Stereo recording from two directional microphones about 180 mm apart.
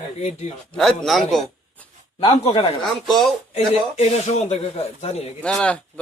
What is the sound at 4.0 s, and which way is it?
A man's voice, 40° left (ahead or behind).